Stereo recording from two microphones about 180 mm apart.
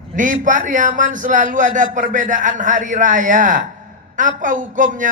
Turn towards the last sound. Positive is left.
turn(degrees=-45)  # may be behind; listen again after turning